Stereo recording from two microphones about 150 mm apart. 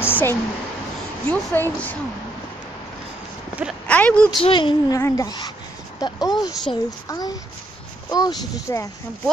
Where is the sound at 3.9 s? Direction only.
10° left (ahead or behind).